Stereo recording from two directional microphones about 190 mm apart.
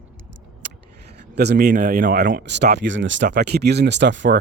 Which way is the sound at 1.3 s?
60° right (ahead or behind).